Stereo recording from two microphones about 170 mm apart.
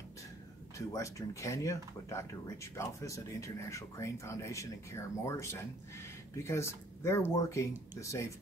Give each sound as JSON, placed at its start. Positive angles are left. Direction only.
{"t": 0.7, "sound": "speech", "side_deg": 20}